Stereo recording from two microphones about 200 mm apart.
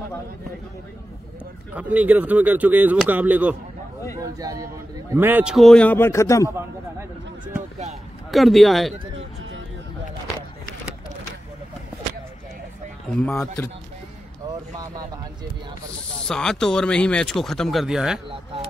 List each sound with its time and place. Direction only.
1.8 s speech: 10° right (ahead or behind)
4.2 s speech: 20° right (ahead or behind); by 6.5 s 15° left (ahead or behind)
8.3 s speech: centre (ahead or behind)
13.1 s speech: 5° left (ahead or behind)
16.3 s speech: 5° left (ahead or behind)